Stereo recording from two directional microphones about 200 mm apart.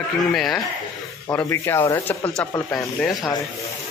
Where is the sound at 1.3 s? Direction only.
10° left (ahead or behind).